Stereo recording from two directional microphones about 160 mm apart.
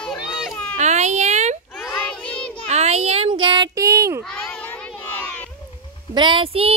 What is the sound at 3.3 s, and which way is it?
Child singing, 30° right (ahead or behind).